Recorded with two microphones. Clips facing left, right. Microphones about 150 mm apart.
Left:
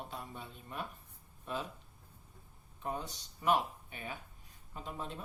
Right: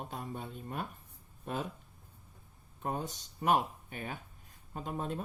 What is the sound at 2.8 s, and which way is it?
Speech, 45° right (ahead or behind).